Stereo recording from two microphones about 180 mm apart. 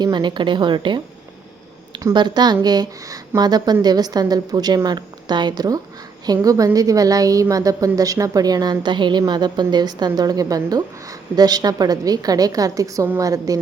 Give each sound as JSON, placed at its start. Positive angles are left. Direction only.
{"t": 0.0, "sound": "a woman's voice", "side_deg": -25}